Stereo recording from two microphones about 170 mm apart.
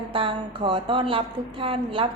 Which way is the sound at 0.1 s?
30° right (ahead or behind).